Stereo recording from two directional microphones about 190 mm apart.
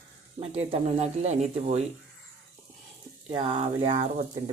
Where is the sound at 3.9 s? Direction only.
40° right (ahead or behind).